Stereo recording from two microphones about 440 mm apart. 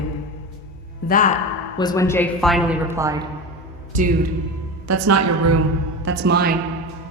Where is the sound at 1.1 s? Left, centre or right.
Centre.